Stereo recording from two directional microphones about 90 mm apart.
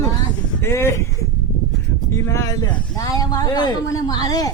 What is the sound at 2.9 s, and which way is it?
Speech, 40° left (ahead or behind).